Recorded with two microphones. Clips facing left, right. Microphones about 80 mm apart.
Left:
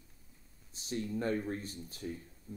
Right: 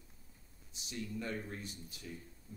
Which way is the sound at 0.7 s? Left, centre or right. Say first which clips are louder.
Left 6 dB; left.